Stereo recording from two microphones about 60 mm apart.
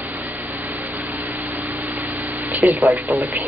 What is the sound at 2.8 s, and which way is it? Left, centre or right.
Speech, right.